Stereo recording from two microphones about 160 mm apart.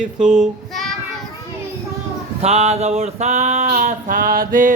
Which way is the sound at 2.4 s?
40° right (ahead or behind).